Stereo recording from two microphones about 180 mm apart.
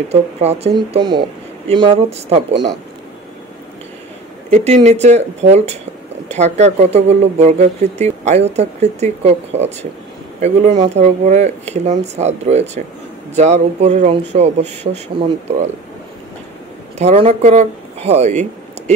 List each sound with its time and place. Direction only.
0.1 s speech: 35° right (ahead or behind)
0.9 s speech: 25° right (ahead or behind)
4.5 s speech: 40° right (ahead or behind)
17.0 s speech: 35° right (ahead or behind)